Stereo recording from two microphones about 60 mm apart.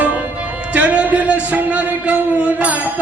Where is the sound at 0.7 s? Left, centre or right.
Right.